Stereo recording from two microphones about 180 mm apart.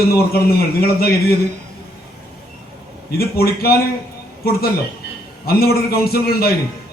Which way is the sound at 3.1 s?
60° left (ahead or behind).